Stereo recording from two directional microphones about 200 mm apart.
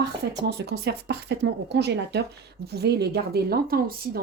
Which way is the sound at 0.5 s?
55° right (ahead or behind).